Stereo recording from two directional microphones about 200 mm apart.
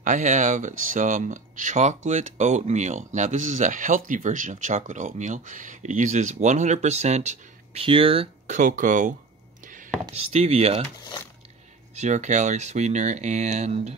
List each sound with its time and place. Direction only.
0.0 s speech: 40° right (ahead or behind)
10.1 s speech: 30° right (ahead or behind)
11.9 s speech: 35° right (ahead or behind)